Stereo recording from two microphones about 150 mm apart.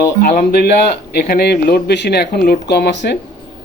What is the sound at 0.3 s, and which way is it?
A man's voice, 90° left.